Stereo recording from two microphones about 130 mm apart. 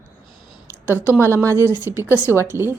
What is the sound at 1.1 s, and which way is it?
A woman's voice, 20° right (ahead or behind).